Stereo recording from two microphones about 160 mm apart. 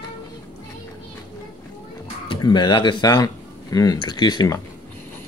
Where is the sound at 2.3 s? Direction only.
30° left (ahead or behind).